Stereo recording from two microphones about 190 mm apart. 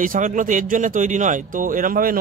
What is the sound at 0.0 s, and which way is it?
Speech, 45° right (ahead or behind).